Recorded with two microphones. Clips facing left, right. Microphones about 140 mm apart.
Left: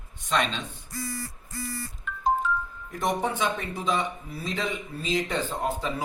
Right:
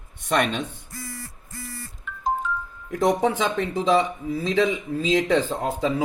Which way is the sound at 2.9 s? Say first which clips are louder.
Right 7 dB; 90° right.